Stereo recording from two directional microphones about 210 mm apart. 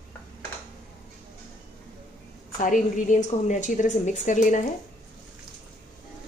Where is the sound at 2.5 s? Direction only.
40° left (ahead or behind).